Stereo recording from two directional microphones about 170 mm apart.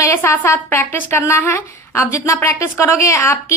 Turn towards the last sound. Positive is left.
turn(degrees=15)  # may be behind; listen again after turning